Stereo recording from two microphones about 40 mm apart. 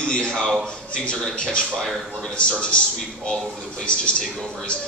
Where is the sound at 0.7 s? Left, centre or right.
Left.